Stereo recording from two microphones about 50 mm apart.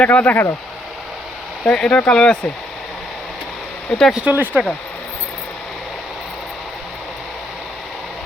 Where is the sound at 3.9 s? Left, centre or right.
Centre.